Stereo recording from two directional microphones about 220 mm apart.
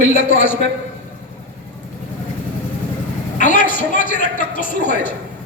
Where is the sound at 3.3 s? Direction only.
35° left (ahead or behind).